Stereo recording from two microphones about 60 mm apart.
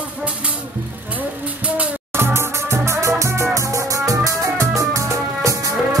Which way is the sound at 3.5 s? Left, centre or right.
Right.